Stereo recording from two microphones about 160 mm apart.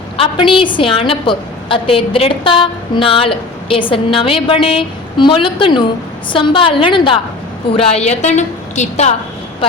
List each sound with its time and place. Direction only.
0.2 s a woman's voice: 35° left (ahead or behind)